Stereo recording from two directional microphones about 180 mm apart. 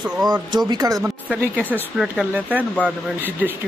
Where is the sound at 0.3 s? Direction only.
25° right (ahead or behind).